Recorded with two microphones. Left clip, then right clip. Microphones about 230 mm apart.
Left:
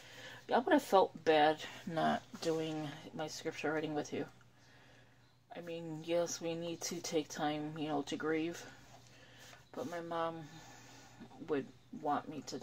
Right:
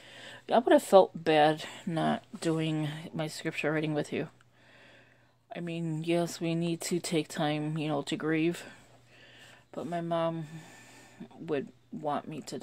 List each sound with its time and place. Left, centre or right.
0.2 s speech: right
5.5 s speech: right
9.8 s speech: right
11.4 s speech: right